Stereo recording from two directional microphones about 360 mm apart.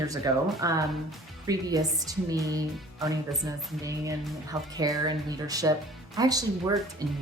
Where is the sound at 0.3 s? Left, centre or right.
Centre.